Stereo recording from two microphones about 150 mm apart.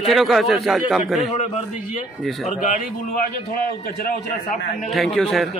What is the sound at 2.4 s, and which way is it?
Speech, 55° left (ahead or behind).